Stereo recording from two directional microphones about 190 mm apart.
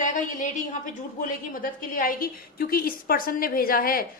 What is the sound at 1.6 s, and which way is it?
A woman's voice, 45° left (ahead or behind).